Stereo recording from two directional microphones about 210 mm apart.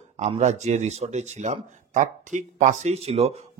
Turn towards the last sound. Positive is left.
turn(degrees=-30)  # may be behind; listen again after turning